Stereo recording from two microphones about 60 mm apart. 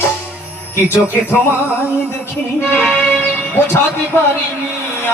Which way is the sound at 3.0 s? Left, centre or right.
Left.